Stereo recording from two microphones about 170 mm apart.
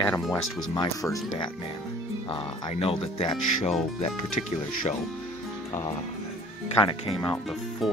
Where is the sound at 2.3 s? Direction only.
35° left (ahead or behind).